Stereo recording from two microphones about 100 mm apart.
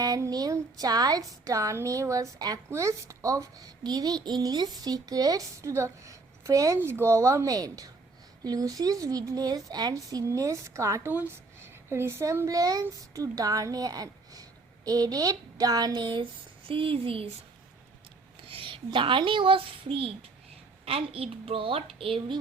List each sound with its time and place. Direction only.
0.0 s a woman's voice: 40° right (ahead or behind)
6.7 s a woman's voice: 25° right (ahead or behind)
11.1 s a woman's voice: 20° right (ahead or behind); by 16.2 s 50° right (ahead or behind)
16.6 s speech: 65° right (ahead or behind)
18.4 s a sound: 60° right (ahead or behind)
18.9 s a child's voice: 55° right (ahead or behind)